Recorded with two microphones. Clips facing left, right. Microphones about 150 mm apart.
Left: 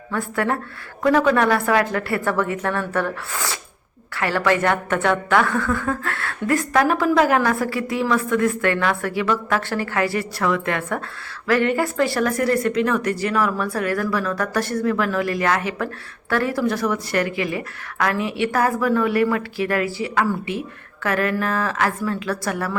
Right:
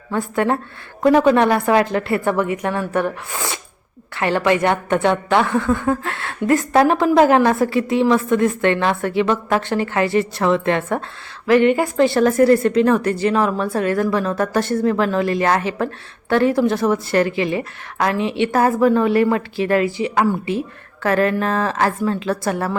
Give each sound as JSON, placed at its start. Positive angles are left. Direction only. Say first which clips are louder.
{"t": 0.1, "sound": "a woman's voice", "louder": "right 4 dB", "side_deg": -20}